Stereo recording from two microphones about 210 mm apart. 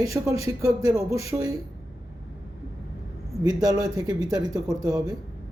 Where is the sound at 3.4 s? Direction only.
20° right (ahead or behind).